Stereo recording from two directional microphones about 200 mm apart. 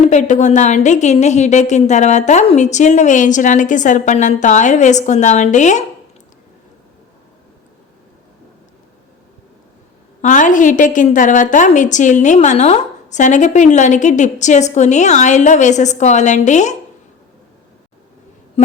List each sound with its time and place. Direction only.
0.1 s a woman's voice: 35° left (ahead or behind)
10.2 s a woman's voice: 40° left (ahead or behind)